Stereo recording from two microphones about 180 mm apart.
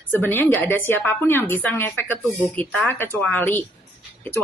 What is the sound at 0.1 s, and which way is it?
Speech, 10° left (ahead or behind).